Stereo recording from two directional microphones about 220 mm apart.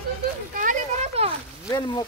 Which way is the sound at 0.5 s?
35° right (ahead or behind).